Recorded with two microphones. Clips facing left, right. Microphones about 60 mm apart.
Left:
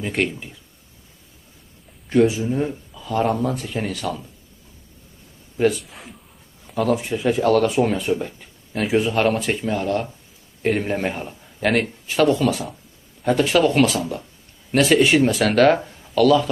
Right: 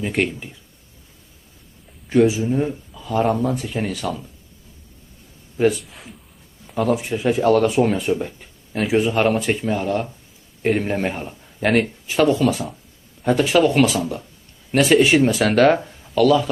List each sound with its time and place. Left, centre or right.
0.0 s speech: centre
2.0 s speech: centre
5.6 s speech: centre